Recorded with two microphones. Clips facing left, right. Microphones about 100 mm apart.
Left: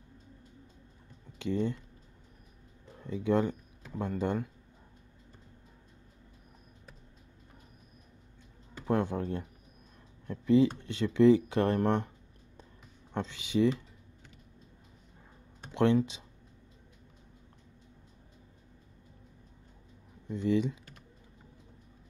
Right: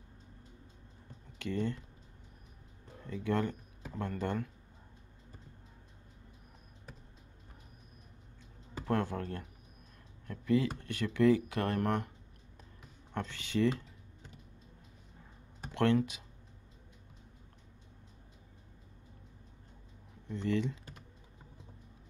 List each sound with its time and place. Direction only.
1.4 s speech: 15° left (ahead or behind)
3.0 s speech: 15° left (ahead or behind)
8.8 s speech: 15° left (ahead or behind)
13.1 s speech: 20° left (ahead or behind)
15.7 s speech: 20° left (ahead or behind)
20.2 s speech: 15° left (ahead or behind)